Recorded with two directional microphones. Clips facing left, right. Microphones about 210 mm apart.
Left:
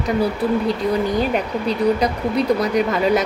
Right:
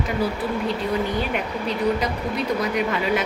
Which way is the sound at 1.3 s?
35° left (ahead or behind).